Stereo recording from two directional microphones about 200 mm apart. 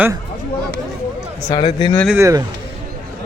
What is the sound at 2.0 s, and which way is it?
Speech, 10° right (ahead or behind).